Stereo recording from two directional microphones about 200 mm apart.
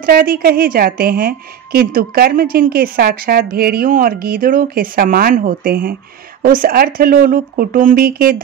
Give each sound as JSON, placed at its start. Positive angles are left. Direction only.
{"t": 0.0, "sound": "a woman's voice", "side_deg": -45}